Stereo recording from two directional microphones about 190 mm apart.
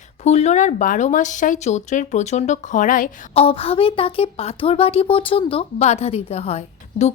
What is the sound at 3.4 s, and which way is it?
A woman's voice, 30° left (ahead or behind).